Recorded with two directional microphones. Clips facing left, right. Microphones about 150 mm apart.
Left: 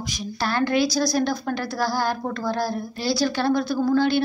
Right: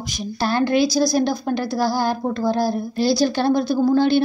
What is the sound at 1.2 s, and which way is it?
A woman's voice, 20° right (ahead or behind).